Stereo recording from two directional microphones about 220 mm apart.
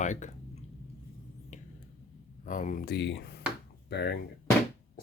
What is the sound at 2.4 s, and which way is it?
Speech, 35° left (ahead or behind).